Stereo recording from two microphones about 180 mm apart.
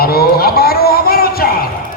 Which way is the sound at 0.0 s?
60° left (ahead or behind).